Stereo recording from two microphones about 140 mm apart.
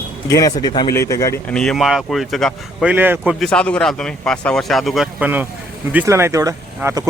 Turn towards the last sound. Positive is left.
turn(degrees=-20)  # may be behind; listen again after turning